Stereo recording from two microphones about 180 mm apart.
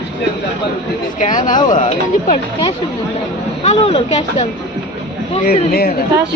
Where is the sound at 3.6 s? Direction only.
35° left (ahead or behind).